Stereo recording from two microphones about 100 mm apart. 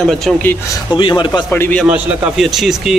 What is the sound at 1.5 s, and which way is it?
Speech, 15° left (ahead or behind).